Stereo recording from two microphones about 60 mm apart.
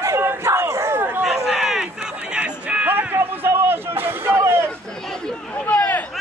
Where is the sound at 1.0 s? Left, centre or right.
Right.